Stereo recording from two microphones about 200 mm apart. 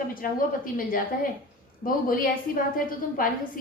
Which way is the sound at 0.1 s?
45° left (ahead or behind).